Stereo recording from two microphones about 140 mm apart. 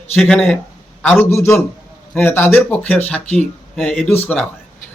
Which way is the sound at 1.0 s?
15° left (ahead or behind).